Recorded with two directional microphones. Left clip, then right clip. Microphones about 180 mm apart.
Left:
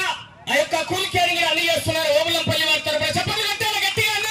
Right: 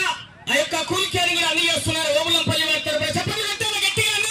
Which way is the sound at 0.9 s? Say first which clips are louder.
Even; 60° right (ahead or behind).